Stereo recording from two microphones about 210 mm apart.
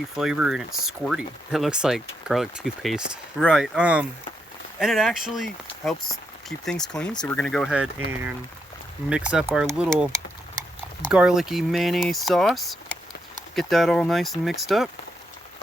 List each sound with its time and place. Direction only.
0.2 s speech: 5° right (ahead or behind)